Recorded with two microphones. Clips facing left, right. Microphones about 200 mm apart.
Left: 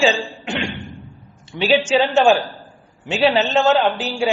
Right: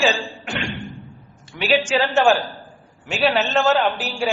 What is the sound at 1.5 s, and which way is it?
Speech, 25° left (ahead or behind).